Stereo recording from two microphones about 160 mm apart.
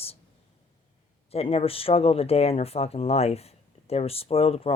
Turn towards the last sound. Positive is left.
turn(degrees=40)  # may be behind; listen again after turning